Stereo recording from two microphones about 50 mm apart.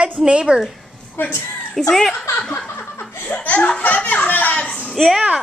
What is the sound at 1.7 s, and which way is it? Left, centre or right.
Speech, centre.